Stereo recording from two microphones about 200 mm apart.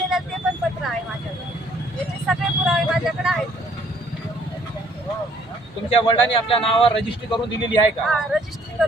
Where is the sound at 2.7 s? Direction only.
Centre (ahead or behind).